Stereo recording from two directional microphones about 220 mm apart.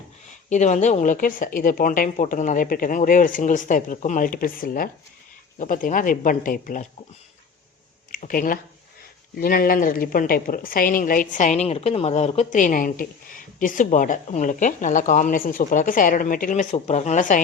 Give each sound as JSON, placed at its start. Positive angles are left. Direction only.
{"t": 0.3, "sound": "a woman's voice", "side_deg": 35}
{"t": 8.1, "sound": "a woman's voice", "side_deg": 40}